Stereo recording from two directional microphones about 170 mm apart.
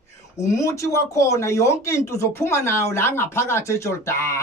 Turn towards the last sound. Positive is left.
turn(degrees=15)  # may be behind; listen again after turning